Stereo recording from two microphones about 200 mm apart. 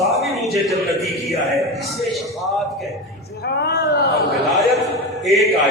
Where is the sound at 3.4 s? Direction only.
55° left (ahead or behind).